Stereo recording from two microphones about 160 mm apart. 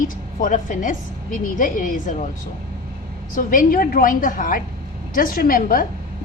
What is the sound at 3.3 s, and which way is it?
A woman's voice, 60° left (ahead or behind).